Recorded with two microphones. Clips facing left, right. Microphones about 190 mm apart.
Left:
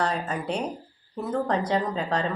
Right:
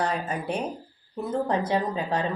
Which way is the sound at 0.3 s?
10° right (ahead or behind).